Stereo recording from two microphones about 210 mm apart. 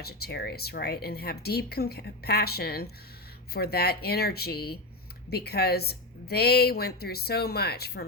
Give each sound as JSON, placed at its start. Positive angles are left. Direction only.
{"t": 0.0, "sound": "speech", "side_deg": 50}